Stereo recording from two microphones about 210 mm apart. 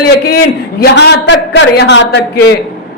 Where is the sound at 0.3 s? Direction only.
50° left (ahead or behind).